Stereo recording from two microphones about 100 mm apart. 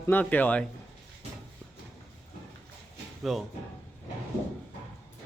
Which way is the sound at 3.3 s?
Centre (ahead or behind).